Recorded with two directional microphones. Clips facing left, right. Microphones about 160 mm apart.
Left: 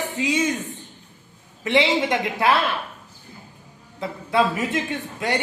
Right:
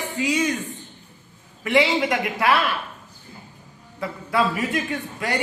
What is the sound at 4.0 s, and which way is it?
A man's voice, 25° left (ahead or behind).